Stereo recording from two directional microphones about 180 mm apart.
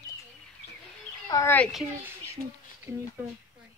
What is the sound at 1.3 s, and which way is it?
Speech, 15° left (ahead or behind).